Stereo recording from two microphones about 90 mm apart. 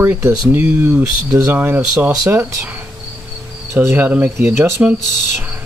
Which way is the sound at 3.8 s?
20° right (ahead or behind).